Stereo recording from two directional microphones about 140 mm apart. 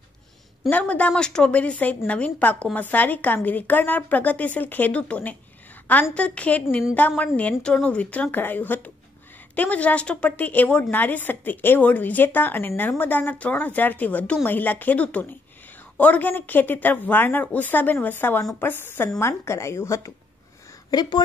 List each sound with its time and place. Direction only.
0.7 s a woman's voice: 10° left (ahead or behind); by 21.2 s 30° left (ahead or behind)